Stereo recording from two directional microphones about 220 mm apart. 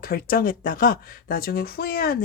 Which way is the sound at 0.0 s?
40° left (ahead or behind).